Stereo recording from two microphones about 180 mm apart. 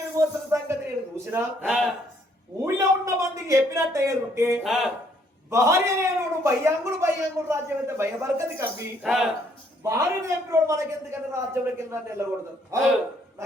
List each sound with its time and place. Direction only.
0.2 s a sound: 15° right (ahead or behind)
1.6 s a man's voice: centre (ahead or behind)
2.6 s a man's voice: 15° right (ahead or behind)
4.6 s a man's voice: centre (ahead or behind)
5.5 s a man's voice: 15° right (ahead or behind)
9.0 s a man's voice: centre (ahead or behind)
9.8 s a man's voice: 15° right (ahead or behind)